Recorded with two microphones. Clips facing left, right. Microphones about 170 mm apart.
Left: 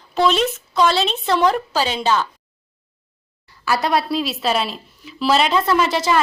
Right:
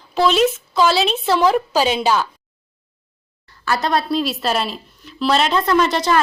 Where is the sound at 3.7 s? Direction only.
10° left (ahead or behind).